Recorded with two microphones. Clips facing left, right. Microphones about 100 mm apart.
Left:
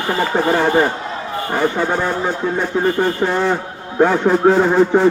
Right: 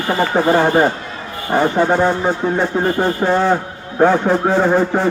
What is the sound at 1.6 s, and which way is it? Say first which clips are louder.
A man's voice: right 4 dB; 20° right (ahead or behind).